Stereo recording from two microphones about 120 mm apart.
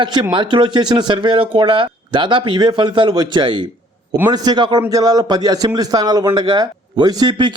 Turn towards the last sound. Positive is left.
turn(degrees=-40)  # may be behind; listen again after turning